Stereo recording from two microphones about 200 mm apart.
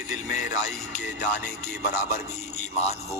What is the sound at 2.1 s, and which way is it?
Speech, 35° left (ahead or behind).